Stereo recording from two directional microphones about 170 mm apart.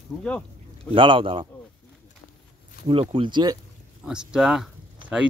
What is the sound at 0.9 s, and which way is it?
Speech, 30° right (ahead or behind).